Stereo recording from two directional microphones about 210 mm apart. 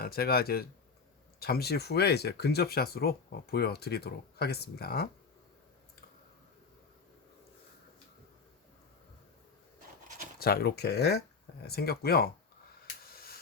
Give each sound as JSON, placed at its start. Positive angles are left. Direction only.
{"t": 0.0, "sound": "speech", "side_deg": 45}
{"t": 10.4, "sound": "speech", "side_deg": 50}
{"t": 13.1, "sound": "a sound", "side_deg": 45}